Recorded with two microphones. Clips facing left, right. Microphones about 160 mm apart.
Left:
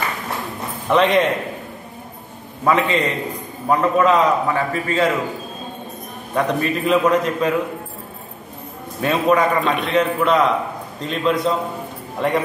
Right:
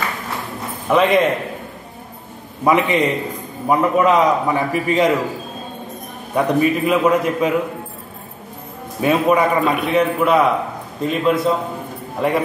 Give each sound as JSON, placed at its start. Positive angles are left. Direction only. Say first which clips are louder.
{"t": 0.8, "sound": "a man's voice", "louder": "right 1 dB", "side_deg": -5}
{"t": 2.6, "sound": "a man's voice", "louder": "right 2 dB", "side_deg": -15}
{"t": 6.3, "sound": "a man's voice", "louder": "right 4 dB", "side_deg": -10}
{"t": 9.0, "sound": "a man's voice", "louder": "right 2 dB", "side_deg": -10}